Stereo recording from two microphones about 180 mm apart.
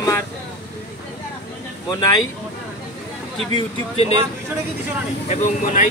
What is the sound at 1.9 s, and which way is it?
Speech, 20° left (ahead or behind).